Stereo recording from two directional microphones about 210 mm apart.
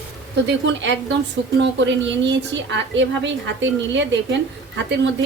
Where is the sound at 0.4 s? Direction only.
55° right (ahead or behind).